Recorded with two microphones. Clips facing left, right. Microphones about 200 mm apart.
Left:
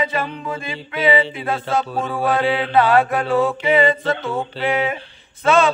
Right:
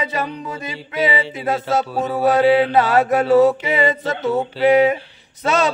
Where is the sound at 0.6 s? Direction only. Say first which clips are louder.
Even; 40° right (ahead or behind).